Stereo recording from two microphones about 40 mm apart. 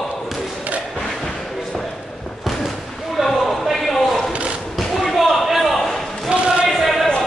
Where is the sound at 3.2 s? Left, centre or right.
Centre.